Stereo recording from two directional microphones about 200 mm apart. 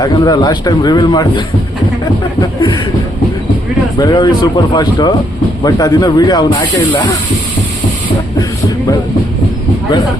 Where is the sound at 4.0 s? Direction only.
20° left (ahead or behind).